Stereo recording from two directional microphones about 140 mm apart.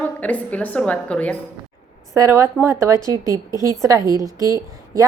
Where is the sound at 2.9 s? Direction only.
30° left (ahead or behind).